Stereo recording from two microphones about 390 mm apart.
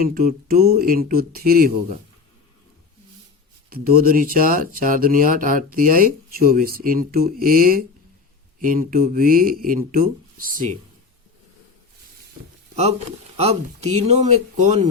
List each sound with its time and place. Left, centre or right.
0.0 s speech: right
3.7 s speech: right
13.3 s speech: centre